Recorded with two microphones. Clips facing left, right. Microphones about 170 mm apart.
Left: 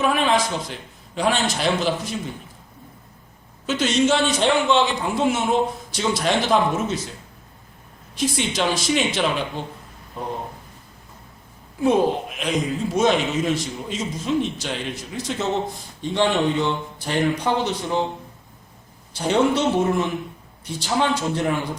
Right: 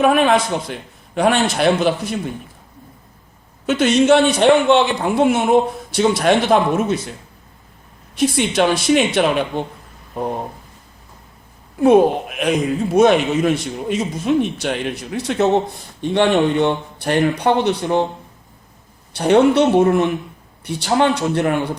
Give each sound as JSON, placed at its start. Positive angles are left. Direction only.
{"t": 0.0, "sound": "speech", "side_deg": -55}
{"t": 3.7, "sound": "speech", "side_deg": -60}
{"t": 8.1, "sound": "speech", "side_deg": -60}
{"t": 11.8, "sound": "speech", "side_deg": -60}
{"t": 19.1, "sound": "speech", "side_deg": -60}